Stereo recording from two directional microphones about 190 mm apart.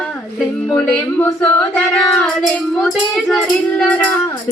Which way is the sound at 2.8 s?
Centre (ahead or behind).